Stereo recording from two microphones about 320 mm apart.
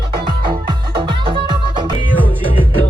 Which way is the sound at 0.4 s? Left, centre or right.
Centre.